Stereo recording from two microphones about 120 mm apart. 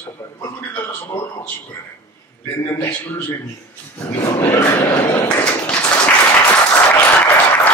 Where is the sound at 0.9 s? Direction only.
20° left (ahead or behind).